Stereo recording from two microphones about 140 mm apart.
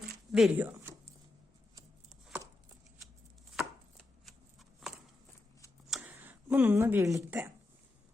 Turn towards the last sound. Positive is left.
turn(degrees=-20)  # may be behind; listen again after turning